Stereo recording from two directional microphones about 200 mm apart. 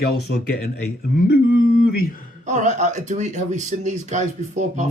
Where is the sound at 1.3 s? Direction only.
55° left (ahead or behind).